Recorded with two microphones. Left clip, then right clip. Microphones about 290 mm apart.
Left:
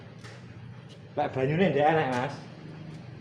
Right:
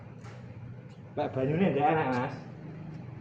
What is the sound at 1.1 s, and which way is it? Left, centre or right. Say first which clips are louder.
Speech: left 3 dB; centre.